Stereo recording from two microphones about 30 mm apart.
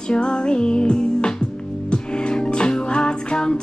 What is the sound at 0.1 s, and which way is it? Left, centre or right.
Music, left.